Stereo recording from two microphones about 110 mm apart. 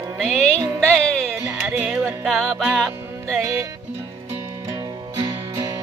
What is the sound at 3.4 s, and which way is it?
Music, 30° right (ahead or behind).